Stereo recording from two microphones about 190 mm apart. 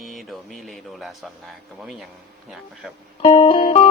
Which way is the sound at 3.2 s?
35° left (ahead or behind).